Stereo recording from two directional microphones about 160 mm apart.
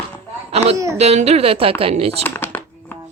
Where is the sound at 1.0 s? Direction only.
40° right (ahead or behind).